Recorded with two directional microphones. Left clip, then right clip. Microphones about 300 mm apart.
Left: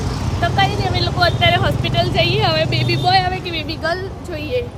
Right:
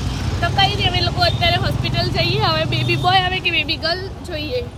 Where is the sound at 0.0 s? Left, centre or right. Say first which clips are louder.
Left 2 dB; centre.